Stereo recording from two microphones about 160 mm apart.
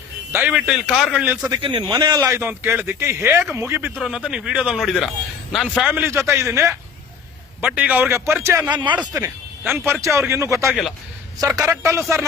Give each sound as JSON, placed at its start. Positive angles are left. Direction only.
{"t": 0.3, "sound": "speech", "side_deg": -5}
{"t": 1.5, "sound": "a man's voice", "side_deg": -30}
{"t": 10.7, "sound": "speech", "side_deg": 0}
{"t": 11.3, "sound": "a man's voice", "side_deg": -20}